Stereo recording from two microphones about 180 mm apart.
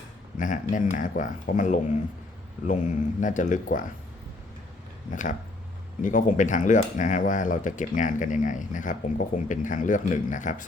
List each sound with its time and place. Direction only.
0.3 s speech: 45° left (ahead or behind)
6.0 s speech: 45° left (ahead or behind)